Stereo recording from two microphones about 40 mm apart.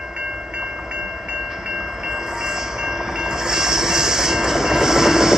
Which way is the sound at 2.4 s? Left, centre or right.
Centre.